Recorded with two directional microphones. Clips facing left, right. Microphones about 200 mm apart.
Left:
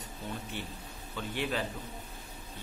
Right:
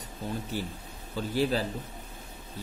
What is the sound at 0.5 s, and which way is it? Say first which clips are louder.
A man's voice: right 6 dB; 35° right (ahead or behind).